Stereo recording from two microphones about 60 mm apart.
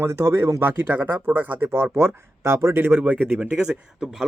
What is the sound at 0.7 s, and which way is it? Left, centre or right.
Speech, right.